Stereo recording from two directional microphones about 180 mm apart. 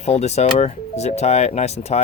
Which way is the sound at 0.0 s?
35° left (ahead or behind).